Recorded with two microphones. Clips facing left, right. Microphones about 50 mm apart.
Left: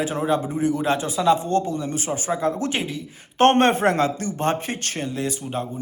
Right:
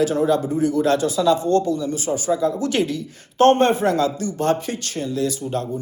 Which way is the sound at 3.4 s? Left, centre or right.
Left.